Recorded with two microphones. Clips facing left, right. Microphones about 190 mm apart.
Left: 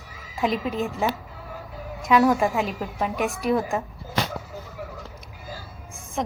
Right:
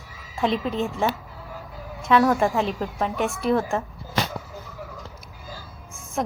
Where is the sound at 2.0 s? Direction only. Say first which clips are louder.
Even; 15° left (ahead or behind).